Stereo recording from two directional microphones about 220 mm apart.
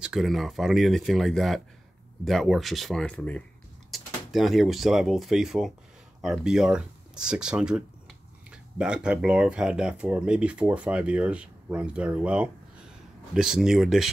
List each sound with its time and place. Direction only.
0.0 s speech: centre (ahead or behind)